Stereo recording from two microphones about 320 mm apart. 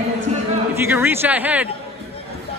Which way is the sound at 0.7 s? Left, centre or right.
Centre.